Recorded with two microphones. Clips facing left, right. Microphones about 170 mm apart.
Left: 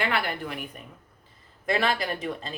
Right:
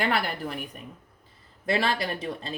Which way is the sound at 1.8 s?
35° right (ahead or behind).